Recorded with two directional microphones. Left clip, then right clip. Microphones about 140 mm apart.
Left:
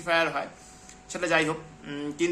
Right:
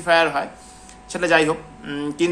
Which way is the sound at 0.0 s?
15° left (ahead or behind).